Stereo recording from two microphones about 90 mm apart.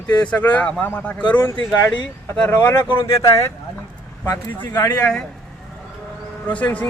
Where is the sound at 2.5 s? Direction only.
30° left (ahead or behind).